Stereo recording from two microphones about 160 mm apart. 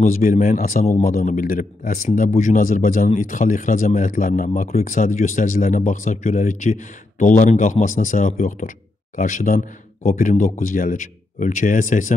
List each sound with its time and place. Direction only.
0.0 s speech: 60° left (ahead or behind)